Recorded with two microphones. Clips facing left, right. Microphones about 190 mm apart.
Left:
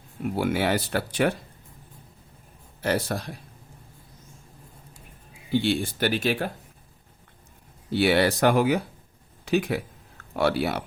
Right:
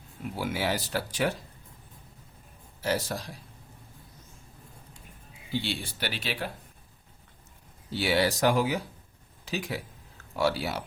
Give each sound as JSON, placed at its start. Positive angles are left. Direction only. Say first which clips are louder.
{"t": 0.3, "sound": "speech", "louder": "left 6 dB", "side_deg": 60}
{"t": 2.8, "sound": "speech", "louder": "left 4 dB", "side_deg": 60}
{"t": 5.5, "sound": "speech", "louder": "left 9 dB", "side_deg": 50}
{"t": 7.9, "sound": "speech", "louder": "left 5 dB", "side_deg": 60}